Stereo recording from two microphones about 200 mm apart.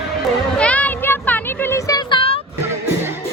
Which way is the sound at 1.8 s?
20° left (ahead or behind).